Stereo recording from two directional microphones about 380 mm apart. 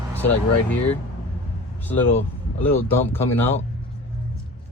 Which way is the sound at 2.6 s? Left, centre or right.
Centre.